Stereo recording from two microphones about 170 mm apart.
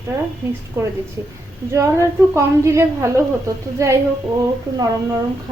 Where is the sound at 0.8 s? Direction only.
15° right (ahead or behind).